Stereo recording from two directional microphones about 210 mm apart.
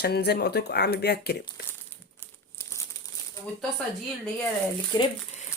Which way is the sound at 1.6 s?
50° left (ahead or behind).